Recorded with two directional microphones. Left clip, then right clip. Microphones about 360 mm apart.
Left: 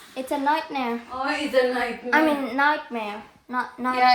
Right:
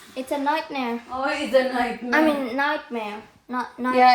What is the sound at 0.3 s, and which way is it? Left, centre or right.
A woman's voice, centre.